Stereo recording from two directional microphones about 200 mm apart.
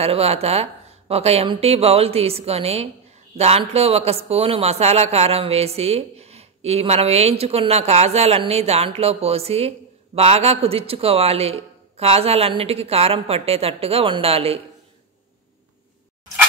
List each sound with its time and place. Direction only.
0.0 s speech: 30° right (ahead or behind)